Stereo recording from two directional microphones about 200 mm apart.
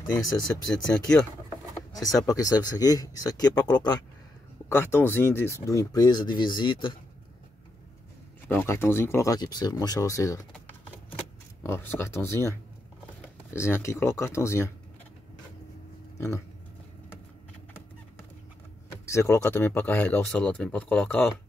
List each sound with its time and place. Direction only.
0.8 s speech: 5° left (ahead or behind)
2.0 s speech: 15° left (ahead or behind)
8.5 s speech: 10° left (ahead or behind)
11.6 s speech: 10° left (ahead or behind)
16.2 s speech: 15° left (ahead or behind)
19.1 s speech: 15° left (ahead or behind)